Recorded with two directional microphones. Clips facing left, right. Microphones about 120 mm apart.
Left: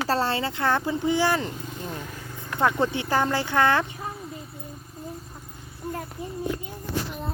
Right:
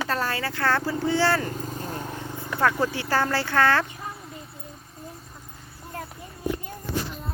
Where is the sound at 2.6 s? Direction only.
20° left (ahead or behind).